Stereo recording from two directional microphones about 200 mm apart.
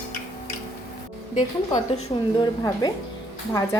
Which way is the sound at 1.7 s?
20° left (ahead or behind).